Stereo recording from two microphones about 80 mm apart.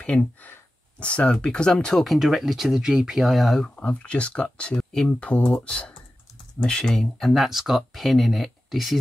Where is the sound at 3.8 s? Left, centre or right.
Centre.